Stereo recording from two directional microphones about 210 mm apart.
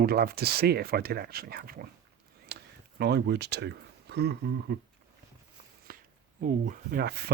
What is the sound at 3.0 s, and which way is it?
Speech, 50° right (ahead or behind).